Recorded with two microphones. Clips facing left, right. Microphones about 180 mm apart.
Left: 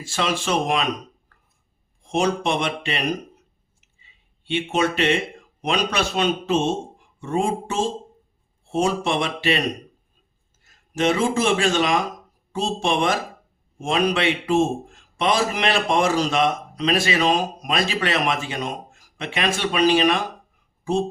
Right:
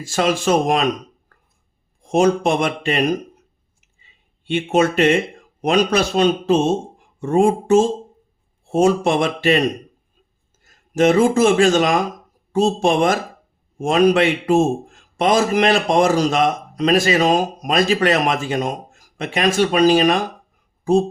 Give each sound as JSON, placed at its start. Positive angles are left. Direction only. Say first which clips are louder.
{"t": 0.0, "sound": "a man's voice", "louder": "right 6 dB", "side_deg": -45}
{"t": 1.3, "sound": "a sound", "louder": "right 4 dB", "side_deg": -45}
{"t": 2.0, "sound": "a man's voice", "louder": "right 6 dB", "side_deg": -45}
{"t": 4.4, "sound": "a man's voice", "louder": "right 5 dB", "side_deg": -45}